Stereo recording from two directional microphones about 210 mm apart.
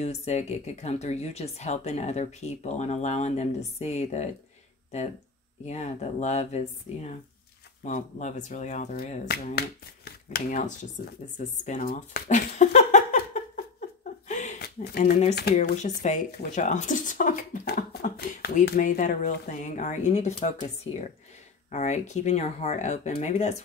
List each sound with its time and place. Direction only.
0.0 s speech: 30° left (ahead or behind)
5.7 s speech: 35° left (ahead or behind)
11.3 s a sound: 35° left (ahead or behind)
15.7 s speech: 35° left (ahead or behind)